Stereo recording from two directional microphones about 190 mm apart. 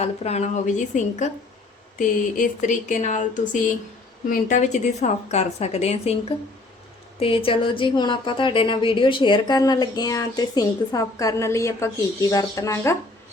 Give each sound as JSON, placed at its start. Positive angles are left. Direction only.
{"t": 0.0, "sound": "a woman's voice", "side_deg": 35}
{"t": 7.2, "sound": "a woman's voice", "side_deg": 30}